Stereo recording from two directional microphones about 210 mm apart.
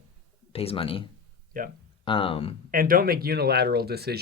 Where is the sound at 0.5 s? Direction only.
25° left (ahead or behind).